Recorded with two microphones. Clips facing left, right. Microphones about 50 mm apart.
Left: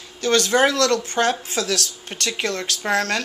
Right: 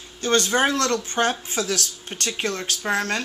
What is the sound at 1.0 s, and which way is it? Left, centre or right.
Speech, left.